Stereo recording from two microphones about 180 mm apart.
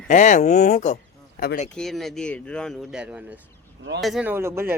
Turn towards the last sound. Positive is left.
turn(degrees=-15)  # may be behind; listen again after turning